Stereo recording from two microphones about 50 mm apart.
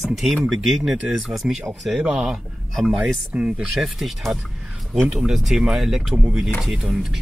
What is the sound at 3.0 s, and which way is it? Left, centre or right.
Speech, right.